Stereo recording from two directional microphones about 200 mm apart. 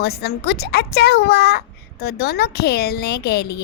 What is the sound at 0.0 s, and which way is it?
A woman's voice, 50° left (ahead or behind).